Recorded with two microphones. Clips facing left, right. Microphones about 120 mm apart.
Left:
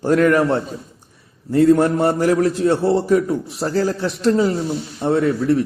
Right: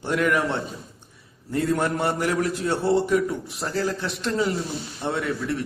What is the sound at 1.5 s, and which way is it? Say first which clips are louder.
A man's voice: left 10 dB; 30° left (ahead or behind).